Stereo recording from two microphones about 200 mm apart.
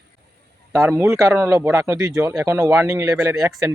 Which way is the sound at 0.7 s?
15° right (ahead or behind).